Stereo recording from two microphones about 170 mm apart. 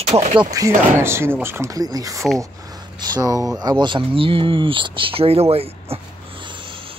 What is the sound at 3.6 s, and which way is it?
Speech, 25° right (ahead or behind).